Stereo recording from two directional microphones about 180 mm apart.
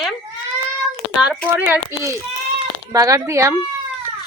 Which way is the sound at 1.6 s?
10° right (ahead or behind).